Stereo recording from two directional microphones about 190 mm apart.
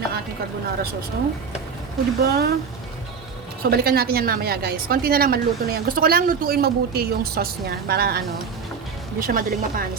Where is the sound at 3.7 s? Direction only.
55° right (ahead or behind).